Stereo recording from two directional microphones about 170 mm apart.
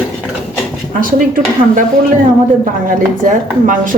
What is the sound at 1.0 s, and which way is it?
Speech, 55° right (ahead or behind).